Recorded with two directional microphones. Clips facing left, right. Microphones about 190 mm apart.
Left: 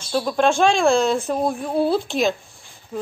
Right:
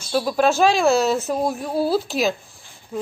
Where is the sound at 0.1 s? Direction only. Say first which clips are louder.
Even; 5° right (ahead or behind).